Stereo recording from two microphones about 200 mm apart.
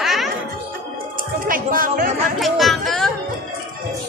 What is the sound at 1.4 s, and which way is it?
Speech, 45° right (ahead or behind).